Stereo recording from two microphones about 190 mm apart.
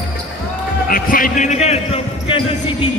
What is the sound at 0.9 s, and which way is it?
Speech, 50° left (ahead or behind).